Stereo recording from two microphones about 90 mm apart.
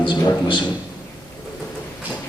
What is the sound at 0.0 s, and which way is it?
Speech, 65° left (ahead or behind).